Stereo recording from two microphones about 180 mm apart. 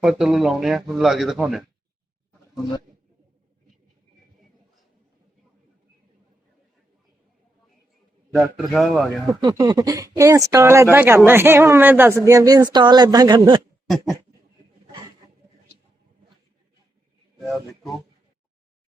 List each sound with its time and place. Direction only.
0.0 s speech: centre (ahead or behind)
8.3 s speech: centre (ahead or behind)
9.4 s speech: 20° right (ahead or behind)